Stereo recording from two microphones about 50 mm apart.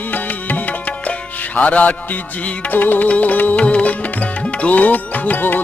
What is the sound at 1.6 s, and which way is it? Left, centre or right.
Music, left.